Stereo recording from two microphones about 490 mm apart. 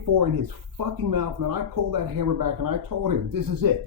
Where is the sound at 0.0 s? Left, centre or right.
Right.